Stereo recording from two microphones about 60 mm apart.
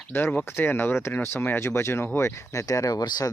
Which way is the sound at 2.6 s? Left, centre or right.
Left.